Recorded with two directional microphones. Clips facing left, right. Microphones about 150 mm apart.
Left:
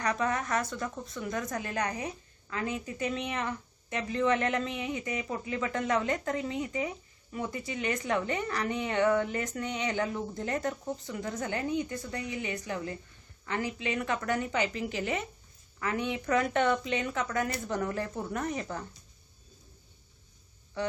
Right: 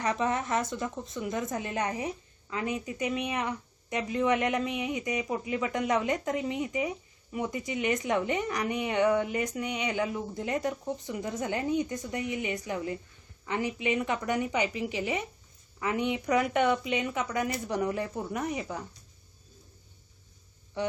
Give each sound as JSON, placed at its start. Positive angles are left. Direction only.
{"t": 0.0, "sound": "speech", "side_deg": -20}